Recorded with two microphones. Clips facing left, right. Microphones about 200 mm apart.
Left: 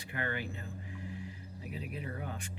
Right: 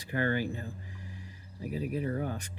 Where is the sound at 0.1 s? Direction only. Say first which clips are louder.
Right 8 dB; 35° right (ahead or behind).